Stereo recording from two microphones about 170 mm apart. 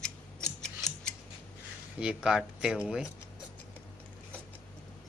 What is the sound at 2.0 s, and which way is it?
Speech, 5° right (ahead or behind).